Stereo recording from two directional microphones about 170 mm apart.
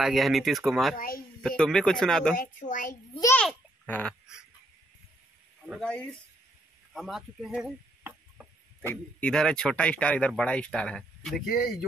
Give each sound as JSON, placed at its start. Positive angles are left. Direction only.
{"t": 0.0, "sound": "speech", "side_deg": 0}
{"t": 0.9, "sound": "a woman's voice", "side_deg": 55}
{"t": 1.6, "sound": "speech", "side_deg": 5}
{"t": 2.3, "sound": "a woman's voice", "side_deg": 50}
{"t": 3.3, "sound": "babbling", "side_deg": 10}
{"t": 5.8, "sound": "speech", "side_deg": 5}
{"t": 6.9, "sound": "a sound", "side_deg": 0}
{"t": 8.8, "sound": "speech", "side_deg": 5}